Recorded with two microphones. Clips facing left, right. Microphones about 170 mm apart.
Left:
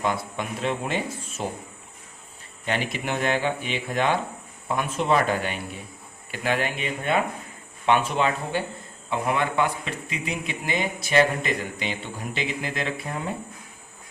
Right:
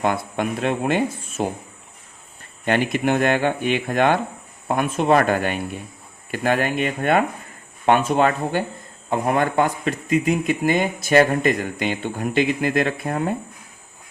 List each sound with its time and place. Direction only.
0.0 s speech: 55° right (ahead or behind)
2.6 s speech: 55° right (ahead or behind)